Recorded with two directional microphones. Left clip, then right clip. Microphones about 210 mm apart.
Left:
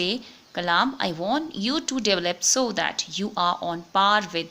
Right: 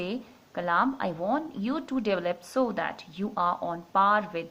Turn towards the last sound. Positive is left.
turn(degrees=45)  # may be behind; listen again after turning